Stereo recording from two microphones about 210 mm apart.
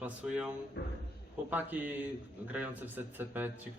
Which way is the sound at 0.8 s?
55° left (ahead or behind).